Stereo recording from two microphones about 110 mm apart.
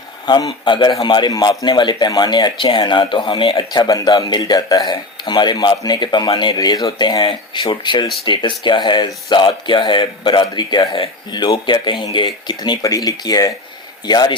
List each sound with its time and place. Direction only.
0.3 s speech: 40° left (ahead or behind)